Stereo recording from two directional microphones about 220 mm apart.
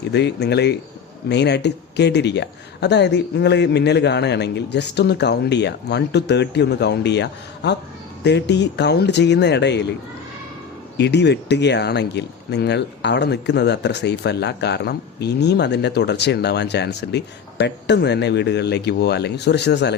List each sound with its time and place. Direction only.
0.1 s speech: 50° left (ahead or behind)
10.9 s speech: 50° left (ahead or behind)